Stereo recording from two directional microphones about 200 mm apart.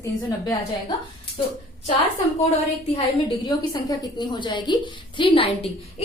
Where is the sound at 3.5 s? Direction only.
20° left (ahead or behind).